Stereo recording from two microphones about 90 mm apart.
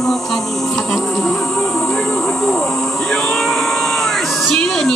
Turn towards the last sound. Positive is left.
turn(degrees=5)  # may be behind; listen again after turning